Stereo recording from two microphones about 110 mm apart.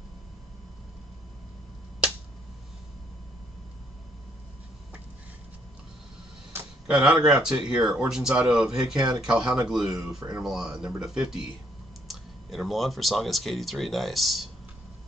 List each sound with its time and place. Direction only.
6.9 s speech: 5° right (ahead or behind)
8.9 s speech: 30° right (ahead or behind)
9.2 s speech: 5° right (ahead or behind)